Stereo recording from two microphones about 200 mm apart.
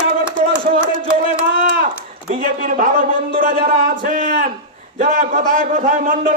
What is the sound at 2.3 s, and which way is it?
Speech, 40° right (ahead or behind).